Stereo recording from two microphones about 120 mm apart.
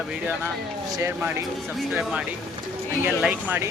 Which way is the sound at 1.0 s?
20° right (ahead or behind).